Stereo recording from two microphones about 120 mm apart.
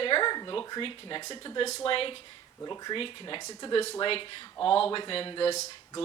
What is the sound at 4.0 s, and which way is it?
Speech, 50° left (ahead or behind).